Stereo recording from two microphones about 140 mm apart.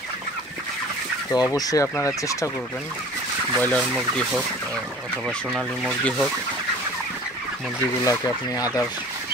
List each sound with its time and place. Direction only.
1.3 s speech: 25° left (ahead or behind)
3.5 s speech: 10° left (ahead or behind)
5.1 s fowl: centre (ahead or behind)
8.0 s speech: 25° left (ahead or behind)